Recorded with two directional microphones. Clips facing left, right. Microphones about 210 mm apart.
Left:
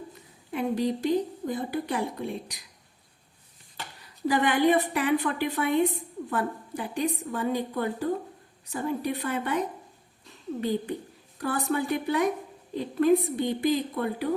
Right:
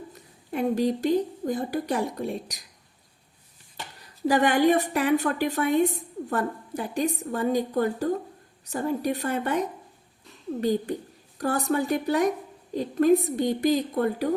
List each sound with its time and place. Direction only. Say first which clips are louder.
0.5 s a woman's voice: right 3 dB; 45° right (ahead or behind)
4.3 s a woman's voice: right 2 dB; 45° right (ahead or behind)